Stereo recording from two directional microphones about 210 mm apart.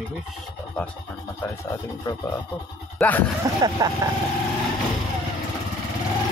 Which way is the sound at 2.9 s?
5° left (ahead or behind).